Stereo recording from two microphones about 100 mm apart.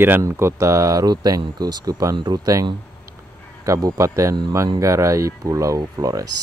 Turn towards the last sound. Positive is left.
turn(degrees=-35)  # may be behind; listen again after turning